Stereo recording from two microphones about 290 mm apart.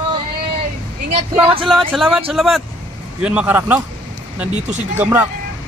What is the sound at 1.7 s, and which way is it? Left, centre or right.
A man's voice, centre.